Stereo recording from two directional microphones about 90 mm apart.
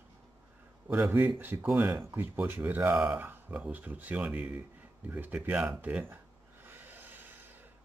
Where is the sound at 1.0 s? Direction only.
35° right (ahead or behind).